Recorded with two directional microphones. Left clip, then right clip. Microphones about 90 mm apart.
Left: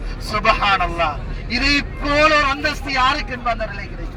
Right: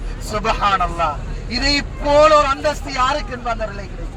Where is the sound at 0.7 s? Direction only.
90° left.